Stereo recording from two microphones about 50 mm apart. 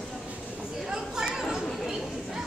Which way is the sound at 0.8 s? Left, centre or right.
Centre.